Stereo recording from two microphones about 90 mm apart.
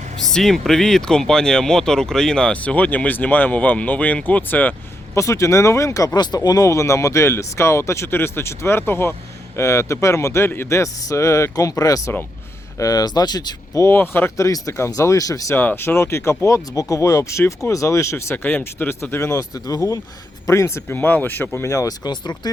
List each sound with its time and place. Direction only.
0.3 s speech: 5° left (ahead or behind)
5.1 s speech: 35° left (ahead or behind)
6.1 s speech: 50° left (ahead or behind)
13.8 s speech: 25° left (ahead or behind); by 15.5 s 40° left (ahead or behind)
15.5 s speech: 25° left (ahead or behind)
20.8 s speech: 20° left (ahead or behind); by 22.5 s 55° left (ahead or behind)